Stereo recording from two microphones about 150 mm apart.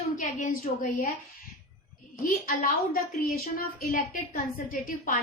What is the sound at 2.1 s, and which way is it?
A woman's voice, 60° left (ahead or behind).